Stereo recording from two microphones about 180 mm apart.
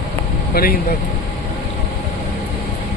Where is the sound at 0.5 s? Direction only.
55° left (ahead or behind).